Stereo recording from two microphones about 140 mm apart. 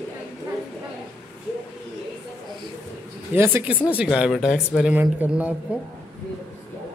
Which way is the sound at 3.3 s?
15° right (ahead or behind).